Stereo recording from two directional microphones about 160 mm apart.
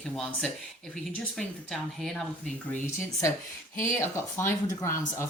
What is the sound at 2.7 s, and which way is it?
Speech, 15° left (ahead or behind).